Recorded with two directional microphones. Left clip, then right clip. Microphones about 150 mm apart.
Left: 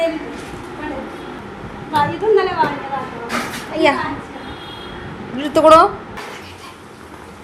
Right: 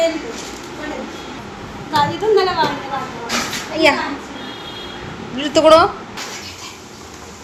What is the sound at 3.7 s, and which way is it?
Speech, 5° left (ahead or behind).